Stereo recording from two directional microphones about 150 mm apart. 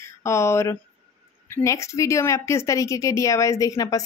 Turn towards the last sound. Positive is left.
turn(degrees=25)  # may be behind; listen again after turning